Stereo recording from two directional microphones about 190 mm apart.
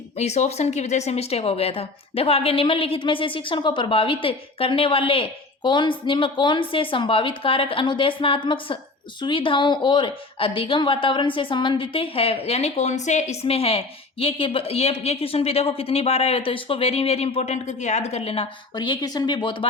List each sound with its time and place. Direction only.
0.2 s a woman's voice: 35° left (ahead or behind)